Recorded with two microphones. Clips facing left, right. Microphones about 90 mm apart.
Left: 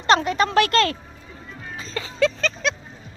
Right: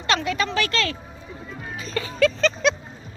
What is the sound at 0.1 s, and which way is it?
Speech, 40° left (ahead or behind).